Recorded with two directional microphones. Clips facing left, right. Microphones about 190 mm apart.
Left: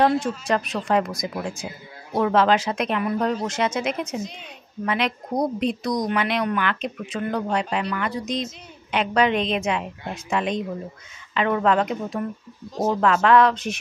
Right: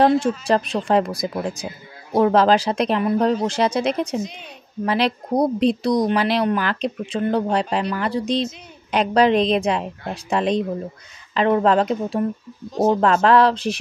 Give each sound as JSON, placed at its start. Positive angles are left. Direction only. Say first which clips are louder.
{"t": 0.5, "sound": "speech", "louder": "right 3 dB", "side_deg": -30}